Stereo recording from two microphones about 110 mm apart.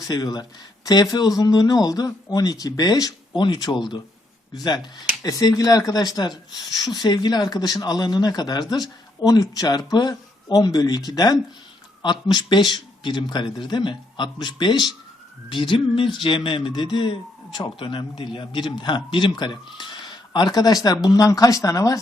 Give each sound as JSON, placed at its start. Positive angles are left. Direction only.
{"t": 0.1, "sound": "speech", "side_deg": 40}